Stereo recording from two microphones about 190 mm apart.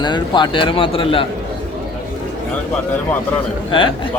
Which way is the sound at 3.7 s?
25° left (ahead or behind).